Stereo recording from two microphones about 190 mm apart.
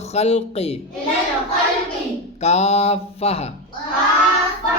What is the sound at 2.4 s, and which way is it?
Speech, 35° left (ahead or behind).